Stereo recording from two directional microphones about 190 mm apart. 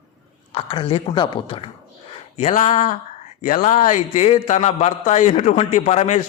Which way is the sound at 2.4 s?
40° left (ahead or behind).